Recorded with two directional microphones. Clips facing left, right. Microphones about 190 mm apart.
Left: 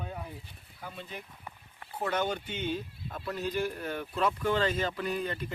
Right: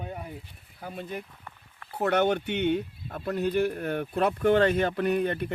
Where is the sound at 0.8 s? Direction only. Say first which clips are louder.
Right 7 dB; 45° right (ahead or behind).